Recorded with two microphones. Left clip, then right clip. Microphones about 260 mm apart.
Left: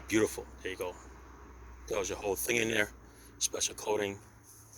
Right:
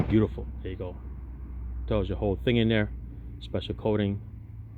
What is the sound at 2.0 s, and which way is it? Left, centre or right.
Speech, centre.